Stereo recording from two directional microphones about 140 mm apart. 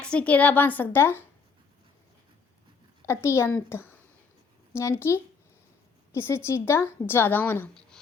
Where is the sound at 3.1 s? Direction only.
20° left (ahead or behind).